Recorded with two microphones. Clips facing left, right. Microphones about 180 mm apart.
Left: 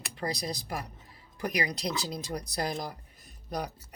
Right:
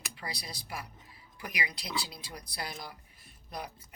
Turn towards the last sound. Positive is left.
turn(degrees=40)  # may be behind; listen again after turning